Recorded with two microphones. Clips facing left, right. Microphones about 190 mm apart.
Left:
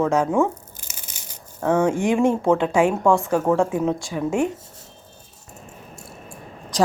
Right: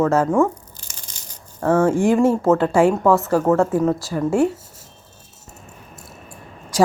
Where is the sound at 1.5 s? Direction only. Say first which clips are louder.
Right 3 dB; 15° left (ahead or behind).